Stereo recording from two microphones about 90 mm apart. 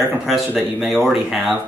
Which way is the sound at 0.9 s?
15° right (ahead or behind).